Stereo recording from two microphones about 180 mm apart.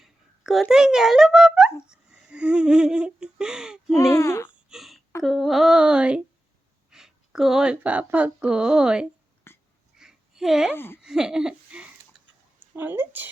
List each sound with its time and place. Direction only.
0.0 s a child's voice: centre (ahead or behind)
4.1 s speech: 15° left (ahead or behind)
4.7 s a sound: centre (ahead or behind)
6.9 s speech: centre (ahead or behind)
9.5 s wheeze: 15° left (ahead or behind)
10.0 s a sound: centre (ahead or behind)
12.7 s a woman's voice: 10° right (ahead or behind)